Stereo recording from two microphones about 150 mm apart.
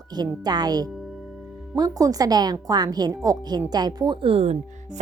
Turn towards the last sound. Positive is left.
turn(degrees=-45)  # may be behind; listen again after turning